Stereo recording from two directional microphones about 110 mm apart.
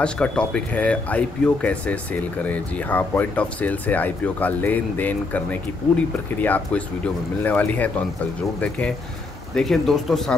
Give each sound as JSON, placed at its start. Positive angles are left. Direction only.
{"t": 0.0, "sound": "speech", "side_deg": 10}
{"t": 9.6, "sound": "speech", "side_deg": 0}